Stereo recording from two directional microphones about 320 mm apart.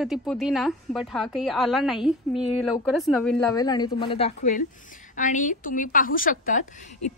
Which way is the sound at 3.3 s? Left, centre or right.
Centre.